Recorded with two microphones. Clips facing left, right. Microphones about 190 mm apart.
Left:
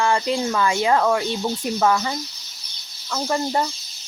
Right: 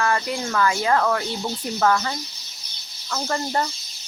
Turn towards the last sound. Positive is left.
turn(degrees=10)  # may be behind; listen again after turning